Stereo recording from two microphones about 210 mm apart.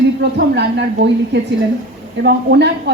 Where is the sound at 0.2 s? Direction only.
55° right (ahead or behind).